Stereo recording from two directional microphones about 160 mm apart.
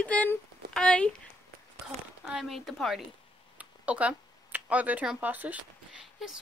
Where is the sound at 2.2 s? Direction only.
Centre (ahead or behind).